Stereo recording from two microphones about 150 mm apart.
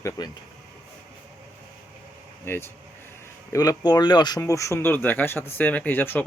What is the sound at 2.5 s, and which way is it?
Speech, 15° left (ahead or behind).